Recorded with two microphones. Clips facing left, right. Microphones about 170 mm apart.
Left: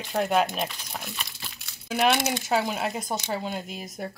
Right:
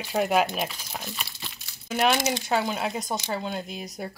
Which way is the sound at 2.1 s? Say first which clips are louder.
Even; 60° left (ahead or behind).